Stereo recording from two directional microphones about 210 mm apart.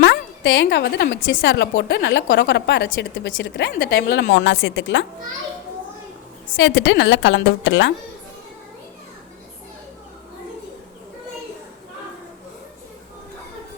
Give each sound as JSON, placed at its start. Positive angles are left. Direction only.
{"t": 0.0, "sound": "a woman's voice", "side_deg": 55}
{"t": 6.6, "sound": "a woman's voice", "side_deg": 60}